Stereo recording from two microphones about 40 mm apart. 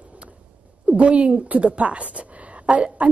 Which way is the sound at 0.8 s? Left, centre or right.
Right.